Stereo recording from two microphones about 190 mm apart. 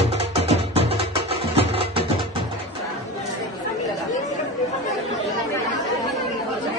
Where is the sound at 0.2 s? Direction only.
30° right (ahead or behind).